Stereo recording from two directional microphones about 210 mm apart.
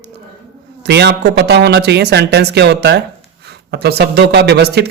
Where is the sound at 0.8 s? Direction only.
55° right (ahead or behind).